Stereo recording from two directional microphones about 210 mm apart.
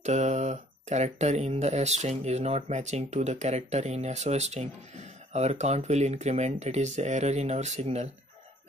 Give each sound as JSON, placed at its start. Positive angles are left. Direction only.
{"t": 0.0, "sound": "speech", "side_deg": -35}